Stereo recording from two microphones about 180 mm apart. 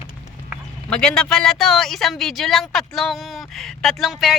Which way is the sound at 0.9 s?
5° left (ahead or behind).